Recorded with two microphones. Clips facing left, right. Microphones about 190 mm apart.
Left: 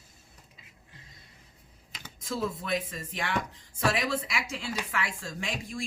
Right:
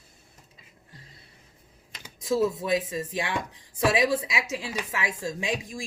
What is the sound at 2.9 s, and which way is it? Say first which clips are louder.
Speech: right 3 dB; 15° right (ahead or behind).